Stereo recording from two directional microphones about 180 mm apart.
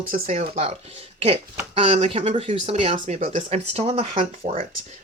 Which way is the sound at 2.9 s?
45° right (ahead or behind).